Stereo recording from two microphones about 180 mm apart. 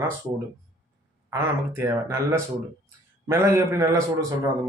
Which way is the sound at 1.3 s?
15° right (ahead or behind).